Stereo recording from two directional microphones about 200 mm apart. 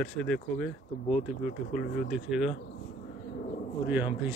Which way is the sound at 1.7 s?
45° left (ahead or behind).